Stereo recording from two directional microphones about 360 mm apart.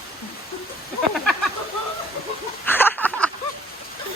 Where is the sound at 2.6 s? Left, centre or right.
Centre.